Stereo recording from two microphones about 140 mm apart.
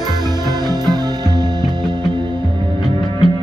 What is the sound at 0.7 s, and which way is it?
Music, 30° right (ahead or behind).